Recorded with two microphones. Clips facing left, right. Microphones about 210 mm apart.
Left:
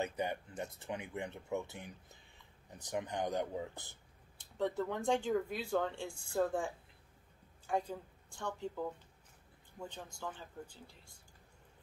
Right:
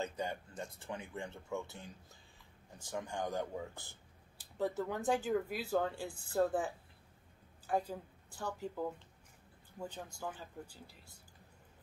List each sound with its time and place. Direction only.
0.0 s speech: 20° left (ahead or behind)
4.4 s a woman's voice: 5° right (ahead or behind)